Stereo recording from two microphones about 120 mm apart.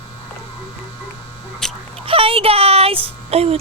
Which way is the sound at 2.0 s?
50° right (ahead or behind).